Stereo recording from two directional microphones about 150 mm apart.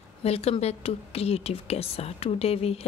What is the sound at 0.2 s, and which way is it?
A woman's voice, 40° left (ahead or behind).